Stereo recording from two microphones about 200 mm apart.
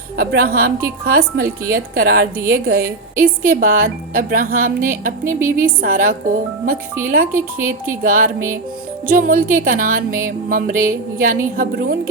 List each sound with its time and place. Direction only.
0.2 s music: 50° right (ahead or behind)